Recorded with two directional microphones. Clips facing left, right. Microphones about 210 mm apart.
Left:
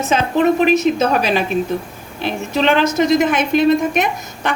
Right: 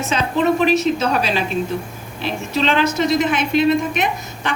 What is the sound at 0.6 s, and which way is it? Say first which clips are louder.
Speech: left 3 dB; 50° left (ahead or behind).